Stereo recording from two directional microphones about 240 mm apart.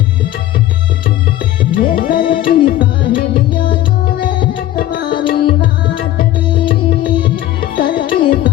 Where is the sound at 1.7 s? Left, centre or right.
Left.